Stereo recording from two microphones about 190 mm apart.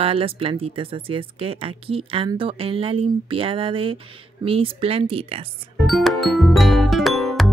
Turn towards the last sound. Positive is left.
turn(degrees=0)  # may be behind; listen again after turning